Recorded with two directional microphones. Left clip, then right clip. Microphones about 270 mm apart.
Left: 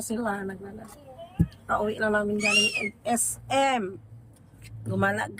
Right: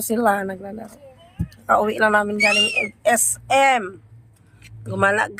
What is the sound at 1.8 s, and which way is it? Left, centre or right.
Speech, centre.